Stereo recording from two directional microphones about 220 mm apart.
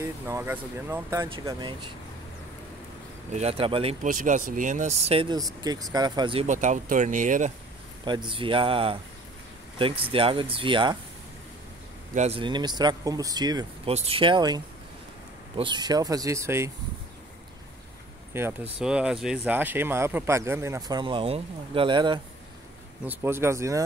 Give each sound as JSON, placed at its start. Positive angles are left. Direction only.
{"t": 0.0, "sound": "speech", "side_deg": -10}
{"t": 3.3, "sound": "speech", "side_deg": -25}
{"t": 8.3, "sound": "speech", "side_deg": -25}
{"t": 12.1, "sound": "speech", "side_deg": -30}
{"t": 18.3, "sound": "speech", "side_deg": -10}
{"t": 23.0, "sound": "speech", "side_deg": -10}